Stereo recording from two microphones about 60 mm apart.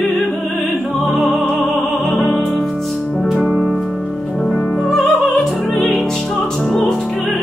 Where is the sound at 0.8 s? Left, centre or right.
Left.